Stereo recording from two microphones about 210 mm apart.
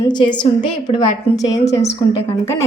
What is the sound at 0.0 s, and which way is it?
A woman's voice, 20° left (ahead or behind).